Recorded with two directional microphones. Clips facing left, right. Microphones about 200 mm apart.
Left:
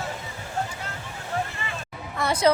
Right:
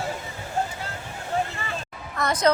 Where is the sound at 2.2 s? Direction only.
10° left (ahead or behind).